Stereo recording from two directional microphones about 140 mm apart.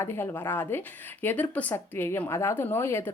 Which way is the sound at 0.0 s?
15° left (ahead or behind).